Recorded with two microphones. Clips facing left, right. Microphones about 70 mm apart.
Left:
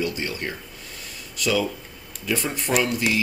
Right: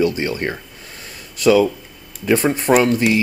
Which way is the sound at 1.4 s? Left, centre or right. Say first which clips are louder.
Right 10 dB; right.